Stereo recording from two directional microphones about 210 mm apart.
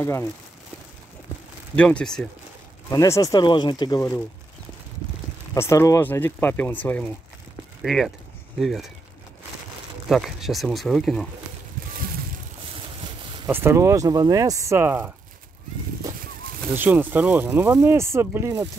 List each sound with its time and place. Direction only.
0.0 s speech: 15° left (ahead or behind)
1.8 s speech: 5° left (ahead or behind)
2.9 s speech: 15° left (ahead or behind)
5.5 s speech: 15° left (ahead or behind)
10.0 s speech: centre (ahead or behind)
13.5 s speech: 10° right (ahead or behind)
16.7 s speech: 10° right (ahead or behind)